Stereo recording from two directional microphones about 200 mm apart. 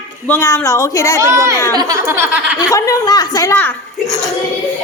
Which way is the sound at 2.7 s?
15° left (ahead or behind).